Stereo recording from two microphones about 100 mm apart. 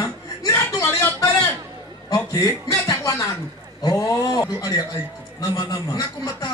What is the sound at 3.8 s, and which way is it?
A man's voice, 35° left (ahead or behind).